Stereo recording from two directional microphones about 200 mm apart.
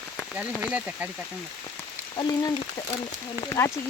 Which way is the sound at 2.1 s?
20° left (ahead or behind).